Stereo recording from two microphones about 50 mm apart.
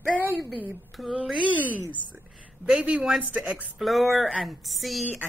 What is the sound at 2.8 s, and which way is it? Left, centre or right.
Speech, right.